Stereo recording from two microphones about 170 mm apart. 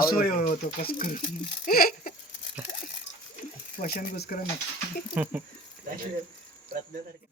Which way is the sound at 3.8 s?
60° left (ahead or behind).